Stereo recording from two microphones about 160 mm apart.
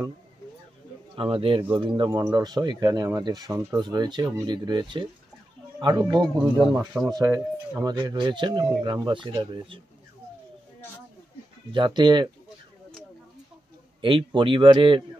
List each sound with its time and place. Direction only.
1.1 s speech: 35° right (ahead or behind)
6.7 s speech: 5° right (ahead or behind)
7.1 s speech: 20° right (ahead or behind)
11.7 s speech: 30° right (ahead or behind)
14.0 s a man's voice: 30° right (ahead or behind)